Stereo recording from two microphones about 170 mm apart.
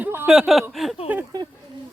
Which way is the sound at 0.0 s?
10° right (ahead or behind).